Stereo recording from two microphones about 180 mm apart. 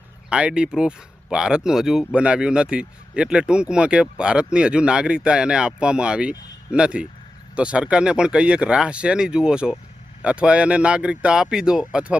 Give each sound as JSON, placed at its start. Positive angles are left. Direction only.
{"t": 0.3, "sound": "speech", "side_deg": -5}